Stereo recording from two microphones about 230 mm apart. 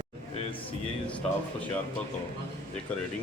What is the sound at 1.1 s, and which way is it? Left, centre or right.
Speech, centre.